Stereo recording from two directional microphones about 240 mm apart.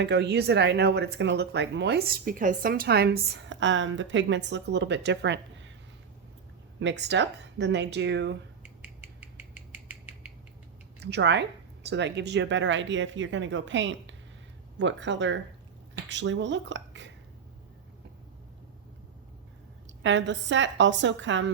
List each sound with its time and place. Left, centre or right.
0.0 s speech: right
6.7 s speech: right
8.8 s a sound: centre
11.0 s speech: right
19.9 s speech: right